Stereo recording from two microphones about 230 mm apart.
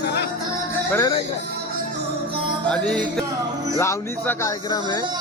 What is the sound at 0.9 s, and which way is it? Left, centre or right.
Speech, centre.